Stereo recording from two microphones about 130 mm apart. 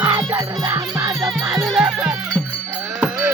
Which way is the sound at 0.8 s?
30° right (ahead or behind).